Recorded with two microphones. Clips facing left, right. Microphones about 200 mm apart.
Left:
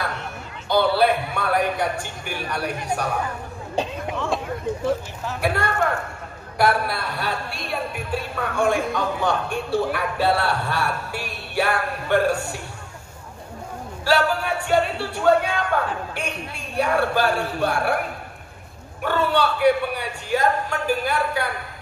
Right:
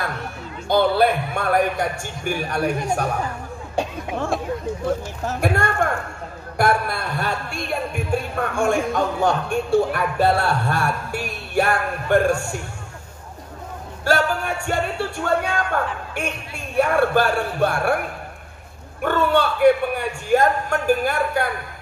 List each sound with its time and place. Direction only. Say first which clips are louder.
0.7 s speech: right 1 dB; 50° right (ahead or behind)
5.2 s speech: right 2 dB; 45° right (ahead or behind)
14.0 s speech: even; 45° right (ahead or behind)
19.0 s speech: right 2 dB; 50° right (ahead or behind)